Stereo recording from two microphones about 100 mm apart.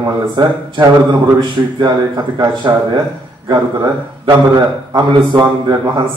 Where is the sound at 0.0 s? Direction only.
45° right (ahead or behind).